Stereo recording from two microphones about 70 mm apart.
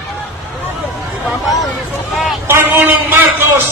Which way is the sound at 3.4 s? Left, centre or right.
Right.